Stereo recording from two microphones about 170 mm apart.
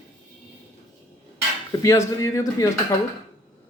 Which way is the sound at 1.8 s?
20° left (ahead or behind).